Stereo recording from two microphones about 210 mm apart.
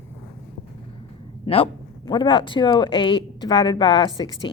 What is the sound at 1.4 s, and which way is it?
Speech, 25° left (ahead or behind).